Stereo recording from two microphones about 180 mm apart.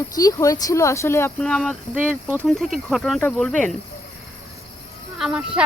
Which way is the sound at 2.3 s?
10° right (ahead or behind).